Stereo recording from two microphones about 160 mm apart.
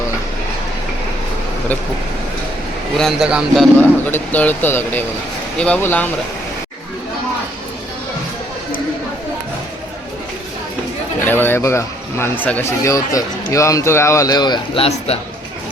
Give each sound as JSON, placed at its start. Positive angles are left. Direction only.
{"t": 3.0, "sound": "a man's voice", "side_deg": -5}
{"t": 3.8, "sound": "speech", "side_deg": 10}
{"t": 11.3, "sound": "speech", "side_deg": 15}